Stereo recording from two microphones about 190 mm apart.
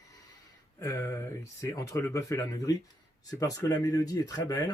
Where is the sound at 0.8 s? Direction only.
15° left (ahead or behind).